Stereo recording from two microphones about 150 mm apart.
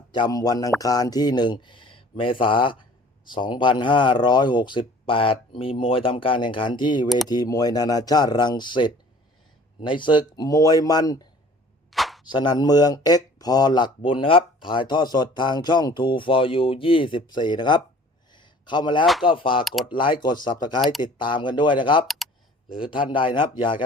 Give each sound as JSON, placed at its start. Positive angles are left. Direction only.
{"t": 0.1, "sound": "speech", "side_deg": 30}
{"t": 11.9, "sound": "a sound", "side_deg": 0}
{"t": 12.3, "sound": "speech", "side_deg": 30}
{"t": 18.3, "sound": "a sound", "side_deg": 30}
{"t": 19.2, "sound": "speech", "side_deg": 35}
{"t": 22.0, "sound": "speech", "side_deg": 0}
{"t": 22.7, "sound": "speech", "side_deg": 35}